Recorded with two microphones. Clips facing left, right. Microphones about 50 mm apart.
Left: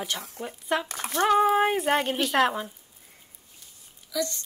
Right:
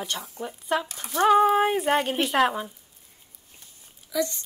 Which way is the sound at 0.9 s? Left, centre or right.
Left.